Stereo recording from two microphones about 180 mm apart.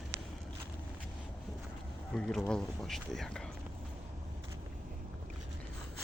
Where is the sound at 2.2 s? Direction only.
5° left (ahead or behind).